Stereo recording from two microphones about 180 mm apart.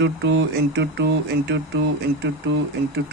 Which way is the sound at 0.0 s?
75° right (ahead or behind).